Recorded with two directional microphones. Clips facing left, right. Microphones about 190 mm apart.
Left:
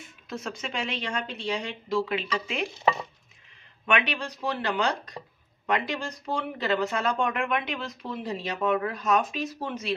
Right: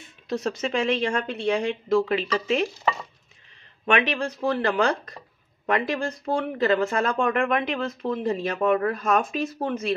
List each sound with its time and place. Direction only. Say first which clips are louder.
0.3 s speech: right 8 dB; 35° right (ahead or behind)
2.7 s stir: left 1 dB; 20° left (ahead or behind)
3.8 s speech: right 4 dB; 50° right (ahead or behind)